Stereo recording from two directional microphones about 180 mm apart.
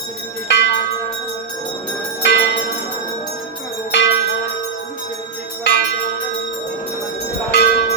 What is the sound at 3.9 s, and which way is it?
Church bell, 75° left (ahead or behind).